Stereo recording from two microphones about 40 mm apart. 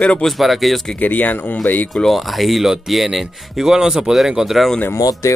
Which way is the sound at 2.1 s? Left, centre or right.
Centre.